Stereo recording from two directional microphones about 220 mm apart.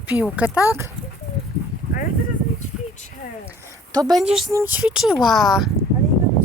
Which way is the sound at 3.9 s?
15° right (ahead or behind).